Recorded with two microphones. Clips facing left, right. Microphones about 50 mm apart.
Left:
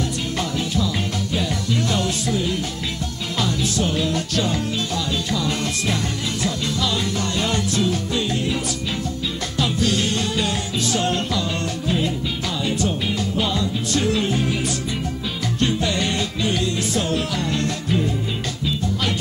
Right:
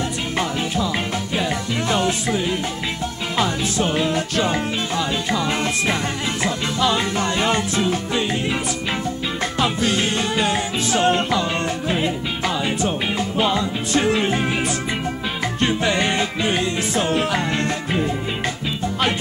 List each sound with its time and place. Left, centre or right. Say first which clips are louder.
1.9 s music: right 2 dB; right
9.6 s music: even; right
15.6 s music: right 2 dB; right